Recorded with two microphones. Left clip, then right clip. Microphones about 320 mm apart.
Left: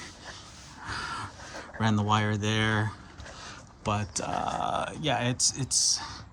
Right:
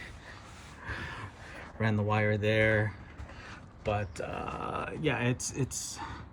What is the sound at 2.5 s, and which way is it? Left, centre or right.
Speech, left.